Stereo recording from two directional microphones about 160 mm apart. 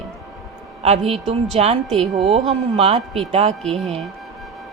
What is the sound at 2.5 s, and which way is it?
Speech, 40° right (ahead or behind).